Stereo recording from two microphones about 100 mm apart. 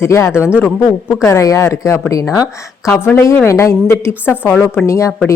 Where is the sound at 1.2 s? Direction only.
30° left (ahead or behind).